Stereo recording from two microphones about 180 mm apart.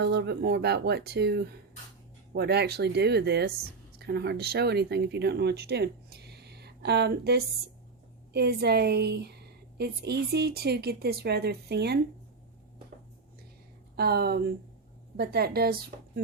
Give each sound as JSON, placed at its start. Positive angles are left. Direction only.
{"t": 0.0, "sound": "a woman's voice", "side_deg": -65}
{"t": 13.9, "sound": "a woman's voice", "side_deg": -60}